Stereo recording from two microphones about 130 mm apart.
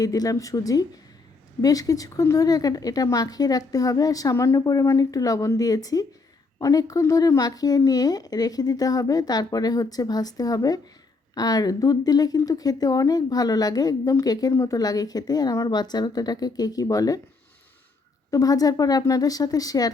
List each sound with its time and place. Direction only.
0.0 s a woman's voice: 30° left (ahead or behind)
18.3 s a woman's voice: 25° left (ahead or behind)